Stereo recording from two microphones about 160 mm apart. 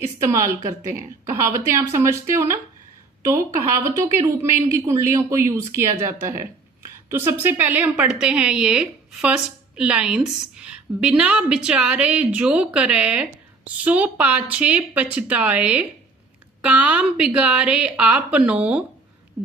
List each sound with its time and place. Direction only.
0.2 s a woman's voice: 15° right (ahead or behind)